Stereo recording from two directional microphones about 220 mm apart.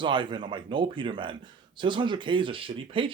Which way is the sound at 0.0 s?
20° right (ahead or behind).